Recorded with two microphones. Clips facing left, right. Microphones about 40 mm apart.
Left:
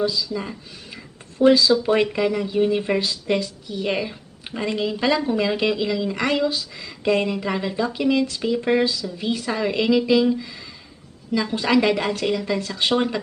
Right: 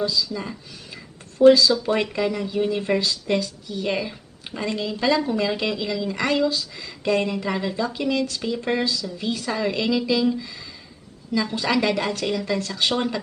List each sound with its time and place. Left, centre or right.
0.0 s a woman's voice: centre
1.5 s a woman's voice: centre
12.9 s a woman's voice: centre